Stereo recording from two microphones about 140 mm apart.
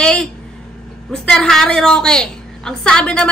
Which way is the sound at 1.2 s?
5° left (ahead or behind).